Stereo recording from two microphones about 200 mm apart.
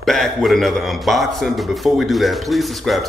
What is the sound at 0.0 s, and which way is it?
Speech, centre (ahead or behind).